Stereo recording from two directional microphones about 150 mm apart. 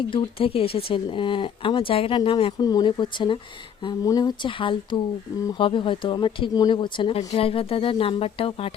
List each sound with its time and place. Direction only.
0.1 s speech: 35° left (ahead or behind)